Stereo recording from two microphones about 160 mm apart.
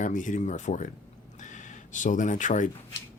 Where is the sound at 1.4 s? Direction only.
50° left (ahead or behind).